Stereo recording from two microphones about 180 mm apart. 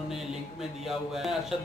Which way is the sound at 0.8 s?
Centre (ahead or behind).